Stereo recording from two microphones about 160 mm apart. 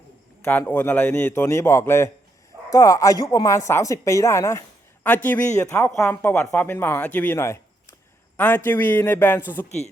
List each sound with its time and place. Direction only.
0.7 s a woman's voice: 10° left (ahead or behind)
9.6 s speech: 45° left (ahead or behind)